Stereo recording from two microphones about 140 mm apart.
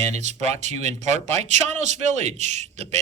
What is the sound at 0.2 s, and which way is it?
A man's voice, 55° right (ahead or behind).